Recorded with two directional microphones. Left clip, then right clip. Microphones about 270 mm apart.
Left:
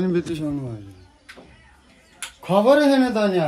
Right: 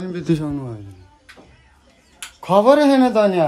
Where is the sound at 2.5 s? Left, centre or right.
Centre.